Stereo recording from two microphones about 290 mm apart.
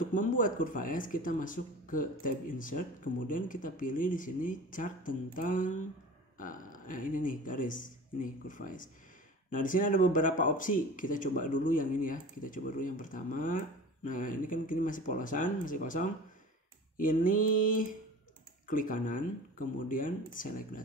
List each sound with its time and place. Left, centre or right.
0.0 s speech: left